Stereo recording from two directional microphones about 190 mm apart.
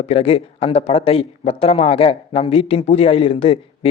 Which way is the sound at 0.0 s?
30° left (ahead or behind).